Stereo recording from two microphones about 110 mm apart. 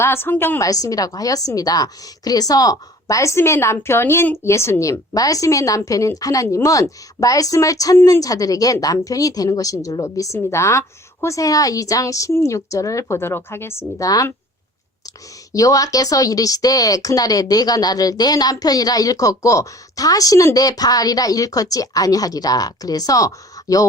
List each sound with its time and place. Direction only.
0.0 s a woman's voice: 20° left (ahead or behind)
0.7 s a woman's voice: 30° left (ahead or behind)
15.5 s a woman's voice: 30° left (ahead or behind)